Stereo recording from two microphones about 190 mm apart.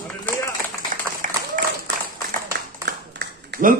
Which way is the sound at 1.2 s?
45° right (ahead or behind).